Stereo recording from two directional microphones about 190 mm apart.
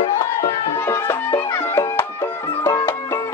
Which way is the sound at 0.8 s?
15° left (ahead or behind).